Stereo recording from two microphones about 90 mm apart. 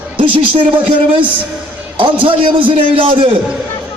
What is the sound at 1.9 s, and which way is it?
A man's voice, 75° right (ahead or behind).